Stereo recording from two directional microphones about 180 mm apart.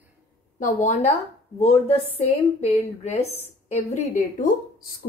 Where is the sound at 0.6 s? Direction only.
40° left (ahead or behind).